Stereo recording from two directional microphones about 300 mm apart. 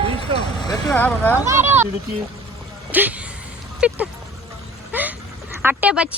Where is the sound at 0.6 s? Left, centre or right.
Centre.